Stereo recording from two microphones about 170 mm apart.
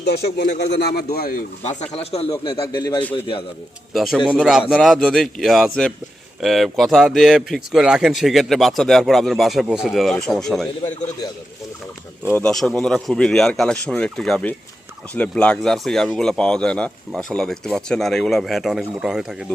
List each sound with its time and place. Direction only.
0.0 s a man's voice: 75° left (ahead or behind); by 2.3 s 35° left (ahead or behind)
2.3 s a man's voice: 25° left (ahead or behind)
3.9 s a man's voice: centre (ahead or behind)
12.3 s a man's voice: 5° left (ahead or behind)